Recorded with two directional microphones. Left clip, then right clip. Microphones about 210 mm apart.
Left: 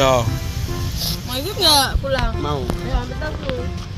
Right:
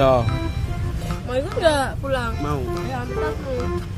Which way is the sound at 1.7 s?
25° right (ahead or behind).